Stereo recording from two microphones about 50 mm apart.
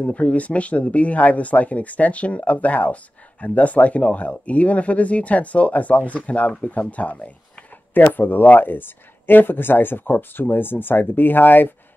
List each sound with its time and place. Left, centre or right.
0.0 s speech: left
7.9 s speech: left